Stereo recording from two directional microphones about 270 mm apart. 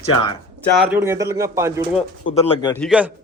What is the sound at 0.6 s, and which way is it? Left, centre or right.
A man's voice, centre.